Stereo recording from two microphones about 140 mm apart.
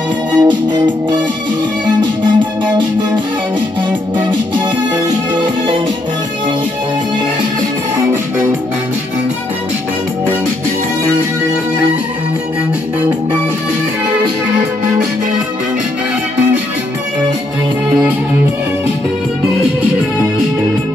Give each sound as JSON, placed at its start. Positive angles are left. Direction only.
{"t": 0.4, "sound": "music", "side_deg": -30}
{"t": 4.3, "sound": "music", "side_deg": -30}